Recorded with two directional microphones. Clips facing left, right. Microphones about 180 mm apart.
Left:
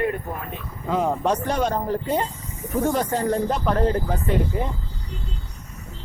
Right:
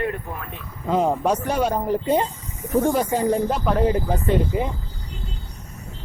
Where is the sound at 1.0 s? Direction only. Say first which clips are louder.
Even; 10° right (ahead or behind).